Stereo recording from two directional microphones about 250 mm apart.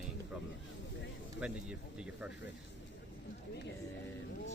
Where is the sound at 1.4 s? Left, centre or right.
Centre.